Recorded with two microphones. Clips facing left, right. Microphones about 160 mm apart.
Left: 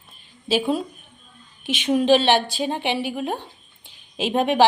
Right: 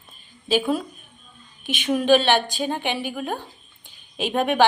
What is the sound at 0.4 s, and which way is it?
A woman's voice, 25° left (ahead or behind).